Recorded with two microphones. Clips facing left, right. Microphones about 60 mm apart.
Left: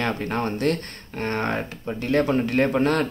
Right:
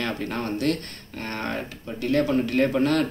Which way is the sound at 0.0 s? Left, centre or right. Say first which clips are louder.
Left 3 dB; left.